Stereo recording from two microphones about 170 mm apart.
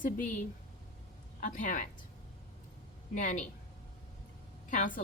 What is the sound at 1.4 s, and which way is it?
Speech, 50° left (ahead or behind).